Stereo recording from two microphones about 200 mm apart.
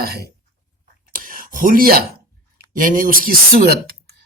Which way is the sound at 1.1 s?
45° right (ahead or behind).